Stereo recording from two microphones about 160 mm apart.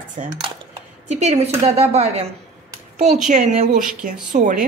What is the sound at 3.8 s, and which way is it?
Speech, 5° right (ahead or behind).